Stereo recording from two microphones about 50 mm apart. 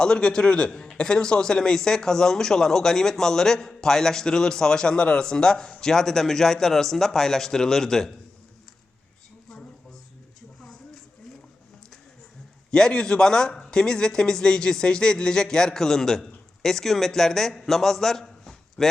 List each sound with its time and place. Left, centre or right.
0.0 s speech: centre
12.7 s speech: centre